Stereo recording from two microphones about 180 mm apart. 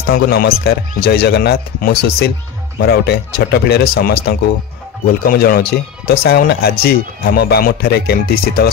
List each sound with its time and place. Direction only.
0.1 s speech: 60° left (ahead or behind)